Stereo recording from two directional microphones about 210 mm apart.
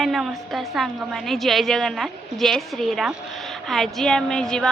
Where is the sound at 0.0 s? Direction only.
Centre (ahead or behind).